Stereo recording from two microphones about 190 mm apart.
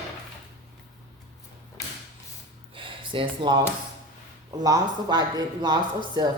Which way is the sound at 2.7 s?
25° right (ahead or behind).